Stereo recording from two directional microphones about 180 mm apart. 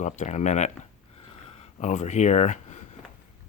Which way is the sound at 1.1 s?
30° left (ahead or behind).